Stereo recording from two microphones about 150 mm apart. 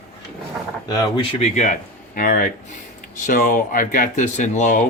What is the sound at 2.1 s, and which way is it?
Speech, 70° left (ahead or behind).